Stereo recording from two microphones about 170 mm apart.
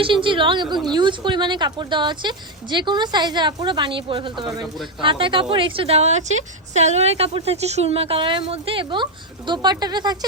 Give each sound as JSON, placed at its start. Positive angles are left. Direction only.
{"t": 0.0, "sound": "a woman's voice", "side_deg": -30}